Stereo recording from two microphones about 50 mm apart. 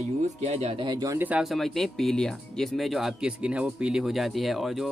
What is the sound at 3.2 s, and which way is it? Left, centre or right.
Speech, centre.